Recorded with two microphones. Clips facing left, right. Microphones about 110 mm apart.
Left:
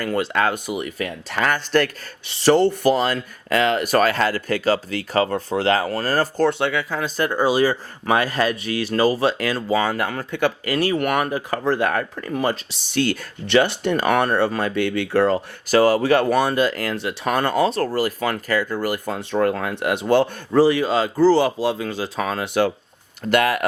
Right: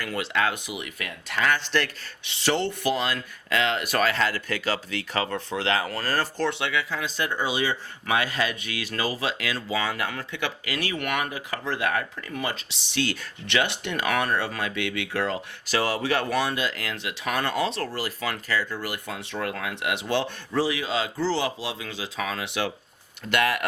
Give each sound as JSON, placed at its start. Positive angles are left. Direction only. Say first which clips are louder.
{"t": 0.0, "sound": "speech", "louder": "left 6 dB", "side_deg": 45}